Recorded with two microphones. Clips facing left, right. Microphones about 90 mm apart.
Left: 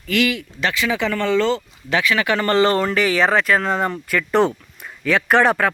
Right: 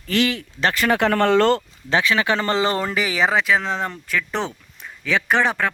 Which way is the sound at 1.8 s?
30° right (ahead or behind).